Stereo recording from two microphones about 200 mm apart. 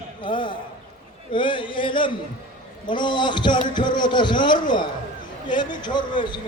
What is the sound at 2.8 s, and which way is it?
A man's voice, 25° left (ahead or behind).